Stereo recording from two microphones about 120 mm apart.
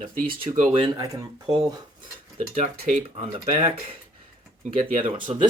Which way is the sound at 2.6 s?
70° right (ahead or behind).